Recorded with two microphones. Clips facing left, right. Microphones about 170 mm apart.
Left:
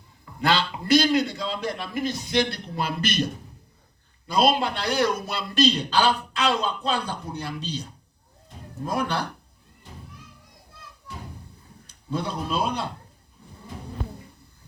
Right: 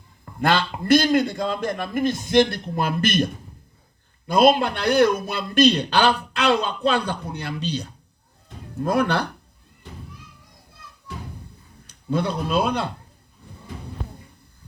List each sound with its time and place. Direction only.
0.3 s a man's voice: 50° right (ahead or behind)
4.3 s a man's voice: 55° right (ahead or behind)
8.4 s a sound: 65° right (ahead or behind)
12.1 s a man's voice: 65° right (ahead or behind)